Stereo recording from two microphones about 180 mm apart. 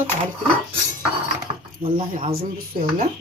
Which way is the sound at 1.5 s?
40° right (ahead or behind).